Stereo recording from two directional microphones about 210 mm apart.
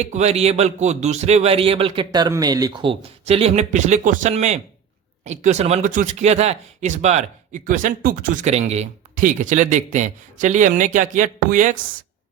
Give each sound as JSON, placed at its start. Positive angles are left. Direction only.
{"t": 0.0, "sound": "speech", "side_deg": -30}